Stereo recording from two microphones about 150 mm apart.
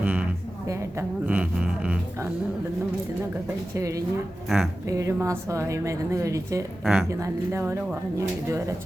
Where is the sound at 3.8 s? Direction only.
20° right (ahead or behind).